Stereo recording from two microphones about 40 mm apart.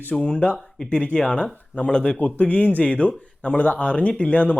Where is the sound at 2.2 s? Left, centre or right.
Left.